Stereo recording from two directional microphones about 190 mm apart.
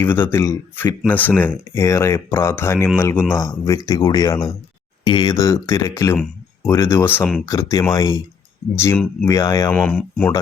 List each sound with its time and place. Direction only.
0.0 s speech: 10° left (ahead or behind)
9.7 s speech: 5° left (ahead or behind)